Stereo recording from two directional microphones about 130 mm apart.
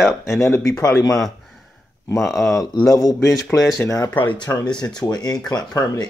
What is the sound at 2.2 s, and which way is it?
Speech, centre (ahead or behind).